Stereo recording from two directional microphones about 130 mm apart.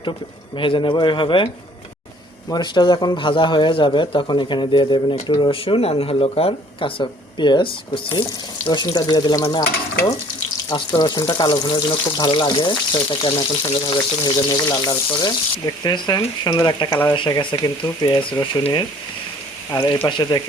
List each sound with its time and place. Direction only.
0.5 s speech: 40° left (ahead or behind)
2.5 s speech: 35° left (ahead or behind)
10.7 s speech: 35° left (ahead or behind)
19.7 s speech: 35° left (ahead or behind)